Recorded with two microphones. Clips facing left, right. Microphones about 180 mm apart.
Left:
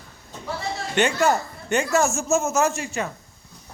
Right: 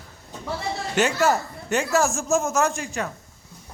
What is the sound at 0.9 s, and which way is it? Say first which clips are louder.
A man's voice: left 1 dB; centre (ahead or behind).